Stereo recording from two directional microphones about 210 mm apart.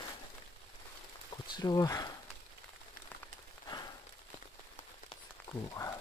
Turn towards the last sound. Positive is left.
turn(degrees=0)  # may be behind; listen again after turning